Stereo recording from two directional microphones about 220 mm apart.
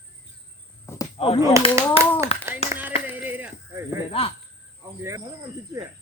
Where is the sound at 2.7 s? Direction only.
10° right (ahead or behind).